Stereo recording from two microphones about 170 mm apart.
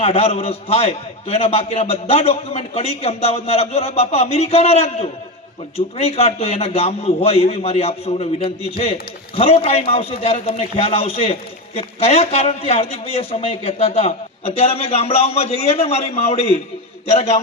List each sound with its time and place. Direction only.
0.0 s a man's voice: 35° left (ahead or behind)